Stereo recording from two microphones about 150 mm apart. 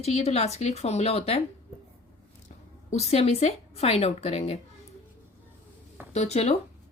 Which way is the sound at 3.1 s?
45° left (ahead or behind).